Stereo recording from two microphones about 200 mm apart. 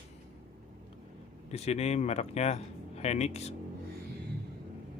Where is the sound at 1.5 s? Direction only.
30° left (ahead or behind).